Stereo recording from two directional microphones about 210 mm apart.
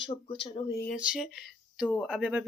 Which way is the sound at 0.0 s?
25° left (ahead or behind).